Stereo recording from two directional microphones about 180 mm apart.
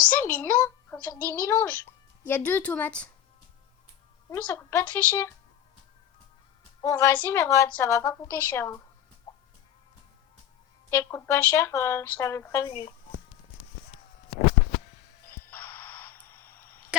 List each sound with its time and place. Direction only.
0.2 s a sound: 10° left (ahead or behind)
1.1 s a woman's voice: 15° left (ahead or behind)
4.3 s a woman's voice: 15° left (ahead or behind)
6.8 s a woman's voice: 10° left (ahead or behind)
9.3 s chicken: 20° left (ahead or behind)
10.8 s a woman's voice: 15° left (ahead or behind)
15.3 s music: 10° left (ahead or behind)